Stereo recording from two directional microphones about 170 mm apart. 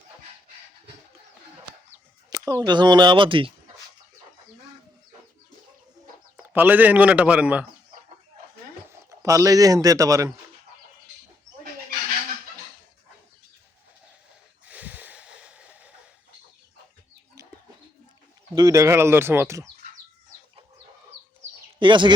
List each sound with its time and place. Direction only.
2.3 s speech: 20° right (ahead or behind)
6.3 s speech: 10° right (ahead or behind)
8.9 s speech: 20° right (ahead or behind)
14.7 s a sound: 10° right (ahead or behind)
18.5 s speech: 20° right (ahead or behind)
21.8 s speech: 30° right (ahead or behind)